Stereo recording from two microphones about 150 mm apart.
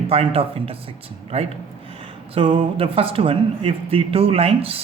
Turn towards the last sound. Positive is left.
turn(degrees=-40)  # may be behind; listen again after turning